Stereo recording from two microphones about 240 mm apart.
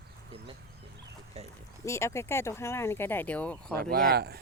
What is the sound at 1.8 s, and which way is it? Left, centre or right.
Speech, centre.